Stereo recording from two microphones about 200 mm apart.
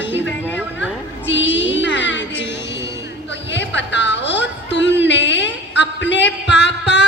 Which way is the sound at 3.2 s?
60° left (ahead or behind).